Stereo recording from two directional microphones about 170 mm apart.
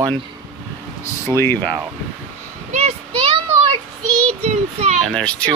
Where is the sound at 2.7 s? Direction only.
40° right (ahead or behind).